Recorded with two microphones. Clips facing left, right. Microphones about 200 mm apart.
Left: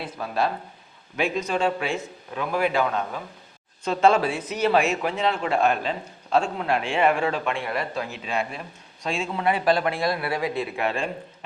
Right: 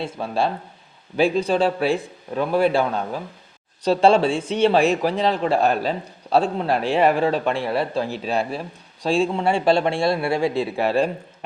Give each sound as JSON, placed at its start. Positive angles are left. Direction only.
{"t": 0.0, "sound": "a man's voice", "side_deg": -30}